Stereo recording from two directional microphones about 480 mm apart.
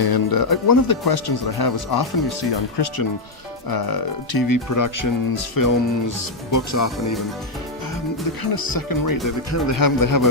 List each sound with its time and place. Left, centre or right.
0.0 s speech: left
8.4 s speech: left